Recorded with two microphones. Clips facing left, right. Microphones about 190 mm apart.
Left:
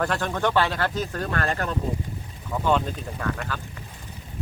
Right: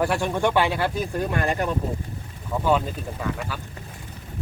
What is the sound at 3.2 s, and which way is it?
Speech, 5° right (ahead or behind).